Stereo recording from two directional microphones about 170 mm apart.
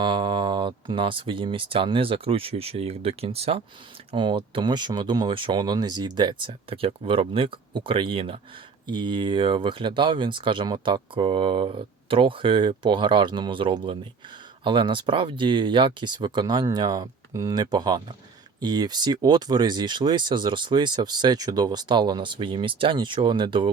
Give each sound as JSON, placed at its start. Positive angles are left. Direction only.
{"t": 0.0, "sound": "speech", "side_deg": -30}